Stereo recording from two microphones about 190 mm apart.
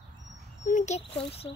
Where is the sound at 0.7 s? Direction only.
35° left (ahead or behind).